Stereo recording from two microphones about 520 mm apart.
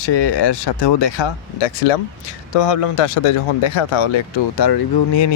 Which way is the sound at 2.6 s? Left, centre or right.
Left.